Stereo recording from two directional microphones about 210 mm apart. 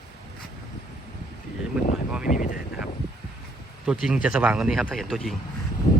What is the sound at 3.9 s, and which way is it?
Speech, 5° right (ahead or behind).